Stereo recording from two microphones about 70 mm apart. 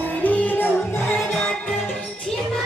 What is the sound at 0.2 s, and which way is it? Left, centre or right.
Music, left.